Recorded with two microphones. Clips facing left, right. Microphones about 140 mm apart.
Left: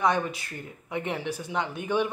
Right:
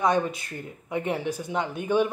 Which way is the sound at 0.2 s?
20° right (ahead or behind).